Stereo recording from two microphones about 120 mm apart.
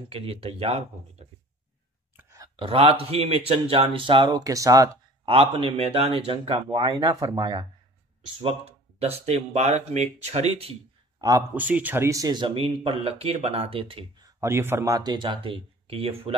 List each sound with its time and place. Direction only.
0.1 s speech: 55° right (ahead or behind)
2.3 s a sound: 30° right (ahead or behind)
2.6 s speech: 55° right (ahead or behind); by 4.9 s 30° right (ahead or behind)
5.2 s speech: 45° right (ahead or behind)
8.4 s speech: 55° right (ahead or behind)
11.1 s speech: 30° right (ahead or behind)
11.5 s speech: 15° right (ahead or behind); by 14.0 s 50° right (ahead or behind)
14.2 s speech: 20° right (ahead or behind)
15.0 s speech: 40° right (ahead or behind)